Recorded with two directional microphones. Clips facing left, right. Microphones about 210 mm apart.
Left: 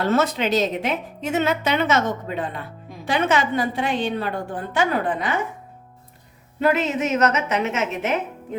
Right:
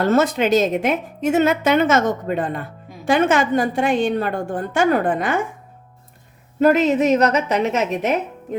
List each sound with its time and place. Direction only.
0.0 s a woman's voice: 50° right (ahead or behind)
6.6 s a woman's voice: 40° right (ahead or behind)